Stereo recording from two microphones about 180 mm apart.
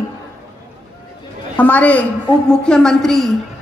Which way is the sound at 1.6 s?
10° left (ahead or behind).